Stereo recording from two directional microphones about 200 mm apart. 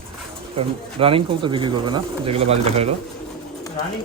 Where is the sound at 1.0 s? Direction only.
25° right (ahead or behind).